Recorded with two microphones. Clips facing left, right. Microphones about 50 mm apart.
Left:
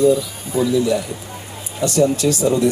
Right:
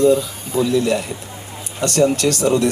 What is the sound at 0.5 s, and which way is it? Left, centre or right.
Speech, right.